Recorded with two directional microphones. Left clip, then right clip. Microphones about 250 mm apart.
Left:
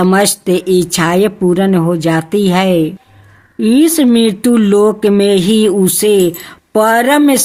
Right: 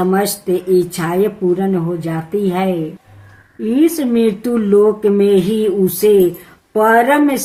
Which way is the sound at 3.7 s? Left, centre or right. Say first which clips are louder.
Left 5 dB; left.